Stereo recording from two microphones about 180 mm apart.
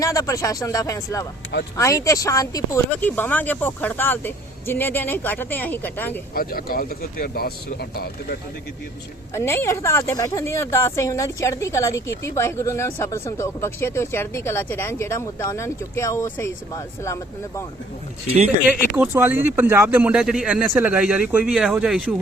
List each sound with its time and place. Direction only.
0.0 s speech: 20° left (ahead or behind)
6.3 s speech: 55° left (ahead or behind)
9.3 s speech: 15° left (ahead or behind)
18.9 s speech: 10° right (ahead or behind)